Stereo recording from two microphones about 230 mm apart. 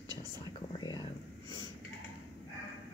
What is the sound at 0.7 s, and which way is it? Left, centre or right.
Mantra, centre.